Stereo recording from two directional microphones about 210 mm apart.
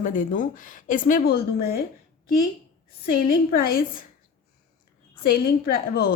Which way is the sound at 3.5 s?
45° left (ahead or behind).